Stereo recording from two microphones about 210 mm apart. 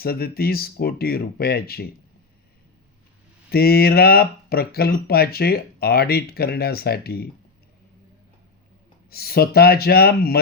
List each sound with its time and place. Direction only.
0.0 s speech: 45° left (ahead or behind)
3.5 s speech: 45° left (ahead or behind)
9.0 s speech: 45° left (ahead or behind)